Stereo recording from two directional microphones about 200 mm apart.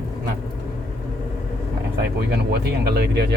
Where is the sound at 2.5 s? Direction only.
55° right (ahead or behind).